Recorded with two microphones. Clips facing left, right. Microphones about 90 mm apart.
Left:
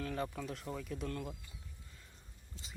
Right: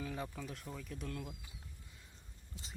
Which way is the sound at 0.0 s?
5° right (ahead or behind).